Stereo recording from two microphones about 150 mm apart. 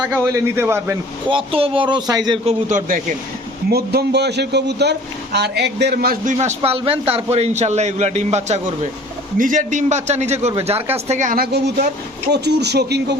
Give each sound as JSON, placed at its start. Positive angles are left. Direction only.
{"t": 0.0, "sound": "a man's voice", "side_deg": -15}
{"t": 1.3, "sound": "speech", "side_deg": -35}
{"t": 2.4, "sound": "a man's voice", "side_deg": -50}
{"t": 3.7, "sound": "a man's voice", "side_deg": -90}
{"t": 6.3, "sound": "a man's voice", "side_deg": -50}
{"t": 9.4, "sound": "a man's voice", "side_deg": -60}
{"t": 11.3, "sound": "a man's voice", "side_deg": -90}